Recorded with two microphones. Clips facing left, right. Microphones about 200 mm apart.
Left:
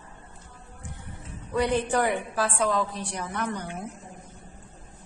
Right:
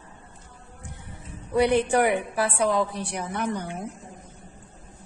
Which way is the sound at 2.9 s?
65° right (ahead or behind).